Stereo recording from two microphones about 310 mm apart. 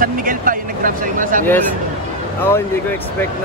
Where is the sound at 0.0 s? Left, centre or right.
Right.